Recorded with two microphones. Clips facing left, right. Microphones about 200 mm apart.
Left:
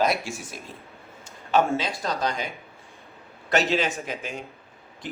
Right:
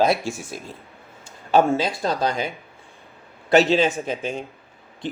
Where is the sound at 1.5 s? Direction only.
30° right (ahead or behind).